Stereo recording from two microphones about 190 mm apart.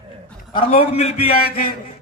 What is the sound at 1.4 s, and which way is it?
Speech, 50° left (ahead or behind).